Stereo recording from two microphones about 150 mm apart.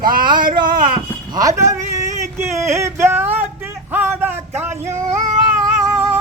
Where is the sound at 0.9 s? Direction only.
25° right (ahead or behind).